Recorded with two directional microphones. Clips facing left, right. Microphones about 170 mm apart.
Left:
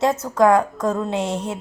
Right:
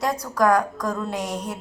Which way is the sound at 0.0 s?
25° left (ahead or behind).